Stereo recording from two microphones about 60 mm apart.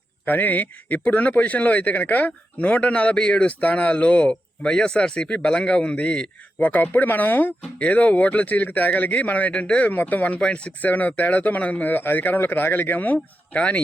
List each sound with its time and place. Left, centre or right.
0.3 s a man's voice: left
6.6 s a man's voice: left